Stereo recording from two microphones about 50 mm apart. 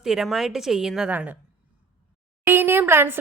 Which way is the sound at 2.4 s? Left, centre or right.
Right.